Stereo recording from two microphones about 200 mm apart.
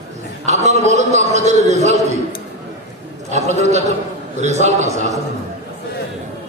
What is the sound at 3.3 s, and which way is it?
A man's voice, 35° right (ahead or behind).